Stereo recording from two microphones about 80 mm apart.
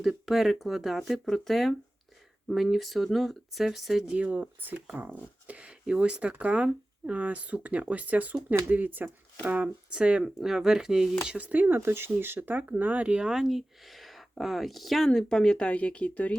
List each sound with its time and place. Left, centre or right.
0.0 s speech: centre
4.1 s speech: centre
11.3 s speech: centre